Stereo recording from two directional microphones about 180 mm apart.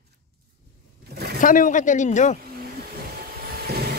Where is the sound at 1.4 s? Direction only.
50° left (ahead or behind).